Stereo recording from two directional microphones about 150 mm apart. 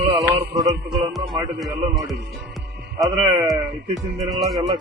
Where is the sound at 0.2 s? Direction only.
20° right (ahead or behind).